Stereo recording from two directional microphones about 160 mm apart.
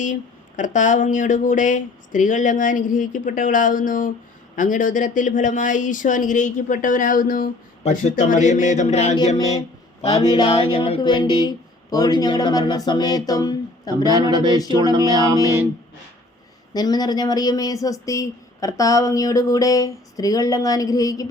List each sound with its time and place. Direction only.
0.0 s speech: 50° left (ahead or behind)
10.1 s speech: 25° left (ahead or behind)
11.0 s speech: 25° left (ahead or behind)
14.1 s speech: 25° right (ahead or behind)
16.7 s speech: 25° left (ahead or behind)